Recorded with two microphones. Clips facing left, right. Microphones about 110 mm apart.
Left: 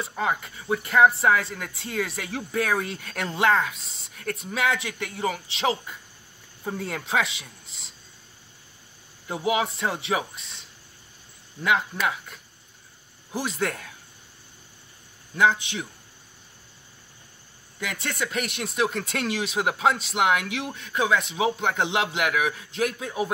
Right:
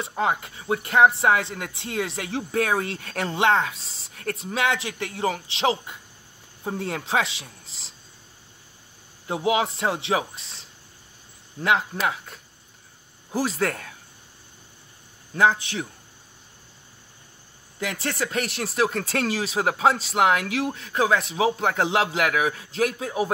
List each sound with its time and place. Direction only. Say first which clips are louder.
0.0 s speech: right 2 dB; 25° right (ahead or behind)
9.3 s speech: right 2 dB; 25° right (ahead or behind)
11.6 s speech: right 1 dB; 30° right (ahead or behind)
15.3 s speech: right 1 dB; 35° right (ahead or behind)
17.7 s speech: right 2 dB; 30° right (ahead or behind)